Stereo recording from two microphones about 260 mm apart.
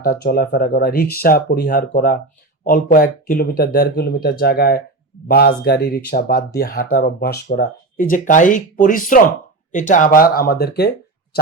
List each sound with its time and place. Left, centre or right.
0.0 s speech: left